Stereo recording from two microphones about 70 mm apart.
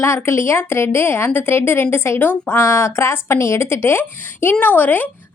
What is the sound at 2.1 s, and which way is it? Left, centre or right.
Speech, left.